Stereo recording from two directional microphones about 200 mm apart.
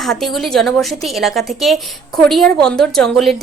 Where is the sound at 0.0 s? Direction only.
Centre (ahead or behind).